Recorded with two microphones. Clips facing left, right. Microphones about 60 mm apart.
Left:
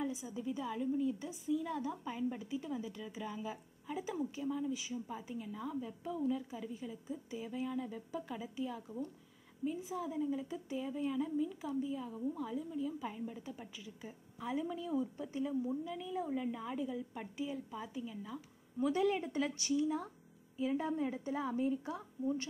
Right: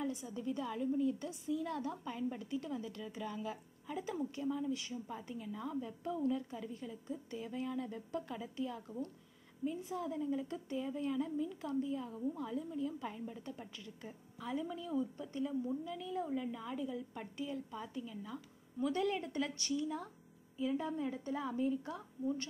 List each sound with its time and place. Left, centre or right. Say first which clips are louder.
0.0 s a woman's voice: even; centre